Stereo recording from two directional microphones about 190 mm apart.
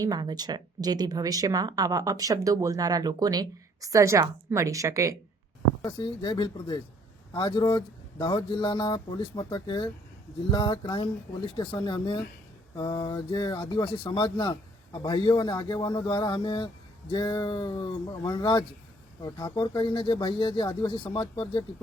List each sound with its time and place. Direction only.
0.0 s speech: 20° right (ahead or behind)
5.8 s speech: 25° left (ahead or behind)